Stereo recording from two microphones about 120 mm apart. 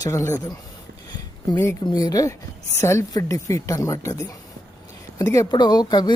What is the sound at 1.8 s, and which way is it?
A woman's voice, 35° left (ahead or behind).